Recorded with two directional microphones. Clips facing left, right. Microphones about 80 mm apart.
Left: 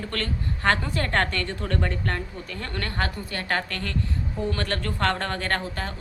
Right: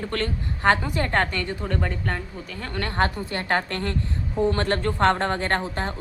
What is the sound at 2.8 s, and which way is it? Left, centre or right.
A woman's voice, right.